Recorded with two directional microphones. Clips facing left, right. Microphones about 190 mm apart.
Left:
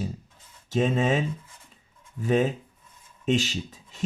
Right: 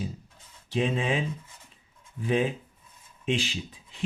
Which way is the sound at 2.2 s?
45° left (ahead or behind).